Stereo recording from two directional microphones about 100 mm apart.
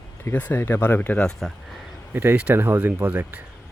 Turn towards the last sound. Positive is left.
turn(degrees=-15)  # may be behind; listen again after turning